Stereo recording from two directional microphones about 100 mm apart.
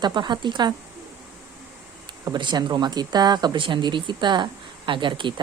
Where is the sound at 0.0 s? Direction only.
50° right (ahead or behind).